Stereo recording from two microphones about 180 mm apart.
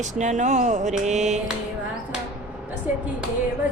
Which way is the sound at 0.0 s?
40° right (ahead or behind).